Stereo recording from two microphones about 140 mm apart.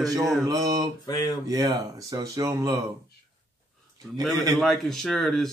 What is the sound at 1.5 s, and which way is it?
Speech, 30° right (ahead or behind).